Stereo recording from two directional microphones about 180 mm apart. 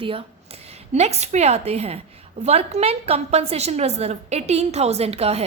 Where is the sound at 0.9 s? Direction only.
35° right (ahead or behind).